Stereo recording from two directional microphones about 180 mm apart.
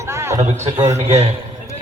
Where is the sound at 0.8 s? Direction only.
35° right (ahead or behind).